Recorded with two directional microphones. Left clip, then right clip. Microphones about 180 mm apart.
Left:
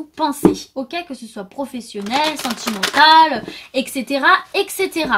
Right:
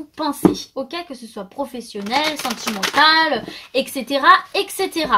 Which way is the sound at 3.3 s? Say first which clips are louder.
Right 1 dB; 35° left (ahead or behind).